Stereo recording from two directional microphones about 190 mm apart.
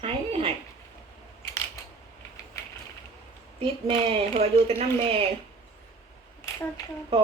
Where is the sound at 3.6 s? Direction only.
30° right (ahead or behind).